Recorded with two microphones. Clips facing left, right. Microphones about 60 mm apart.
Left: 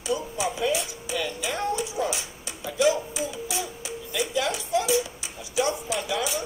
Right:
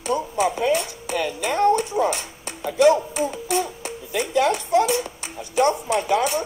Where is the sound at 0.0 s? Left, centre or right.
Right.